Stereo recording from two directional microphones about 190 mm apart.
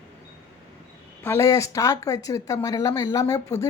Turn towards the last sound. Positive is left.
turn(degrees=15)  # may be behind; listen again after turning